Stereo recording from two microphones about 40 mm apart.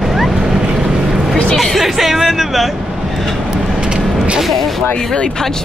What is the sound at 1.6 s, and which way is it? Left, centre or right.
Speech, centre.